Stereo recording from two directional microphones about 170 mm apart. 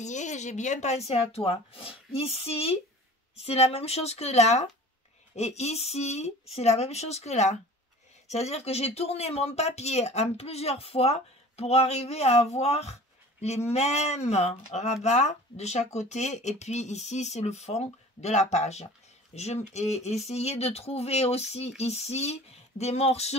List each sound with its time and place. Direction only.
0.0 s speech: 45° left (ahead or behind)